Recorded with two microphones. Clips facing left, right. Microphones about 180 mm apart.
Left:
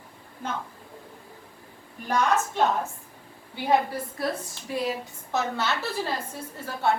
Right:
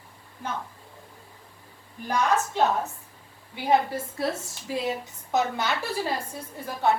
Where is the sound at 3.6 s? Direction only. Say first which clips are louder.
Right 1 dB; 25° right (ahead or behind).